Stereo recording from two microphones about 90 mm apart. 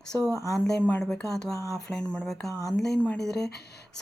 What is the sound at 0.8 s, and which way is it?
Speech, 20° left (ahead or behind).